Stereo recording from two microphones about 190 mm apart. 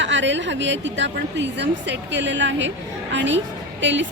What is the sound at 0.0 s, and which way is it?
A woman's voice, 70° right (ahead or behind).